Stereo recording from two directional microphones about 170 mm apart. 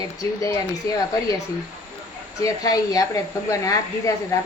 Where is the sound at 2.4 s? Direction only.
20° left (ahead or behind).